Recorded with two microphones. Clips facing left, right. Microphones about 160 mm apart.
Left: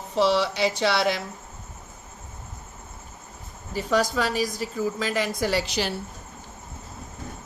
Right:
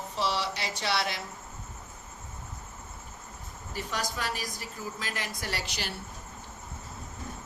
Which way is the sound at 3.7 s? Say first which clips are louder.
Left 11 dB; 90° left.